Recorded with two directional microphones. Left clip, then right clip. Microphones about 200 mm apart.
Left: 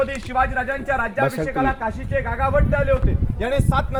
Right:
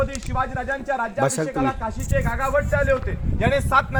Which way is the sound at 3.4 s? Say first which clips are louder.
Right 3 dB; 20° left (ahead or behind).